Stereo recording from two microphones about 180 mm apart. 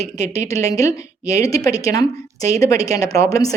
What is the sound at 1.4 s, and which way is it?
A woman's voice, 20° left (ahead or behind).